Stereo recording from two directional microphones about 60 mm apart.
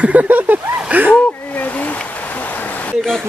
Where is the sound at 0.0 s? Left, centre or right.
Right.